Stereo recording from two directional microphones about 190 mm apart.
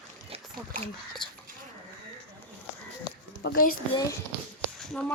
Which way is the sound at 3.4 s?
50° left (ahead or behind).